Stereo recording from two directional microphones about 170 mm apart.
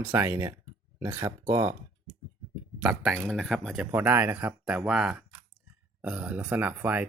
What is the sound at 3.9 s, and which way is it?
Speech, 10° right (ahead or behind).